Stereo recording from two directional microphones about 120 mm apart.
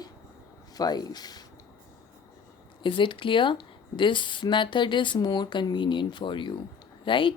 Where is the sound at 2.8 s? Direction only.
40° left (ahead or behind).